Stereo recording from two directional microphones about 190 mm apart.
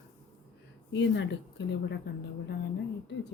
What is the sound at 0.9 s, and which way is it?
Speech, 70° left (ahead or behind).